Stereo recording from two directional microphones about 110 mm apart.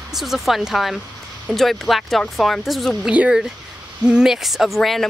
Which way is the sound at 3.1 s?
10° right (ahead or behind).